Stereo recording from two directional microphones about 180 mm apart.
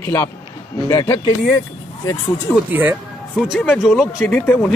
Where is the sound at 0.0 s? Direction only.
15° left (ahead or behind).